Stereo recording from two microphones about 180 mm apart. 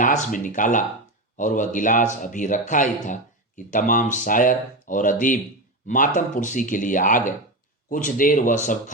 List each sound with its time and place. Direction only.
0.0 s speech: 45° left (ahead or behind)